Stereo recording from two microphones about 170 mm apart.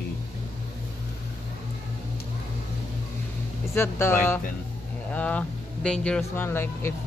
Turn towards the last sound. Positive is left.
turn(degrees=15)  # may be behind; listen again after turning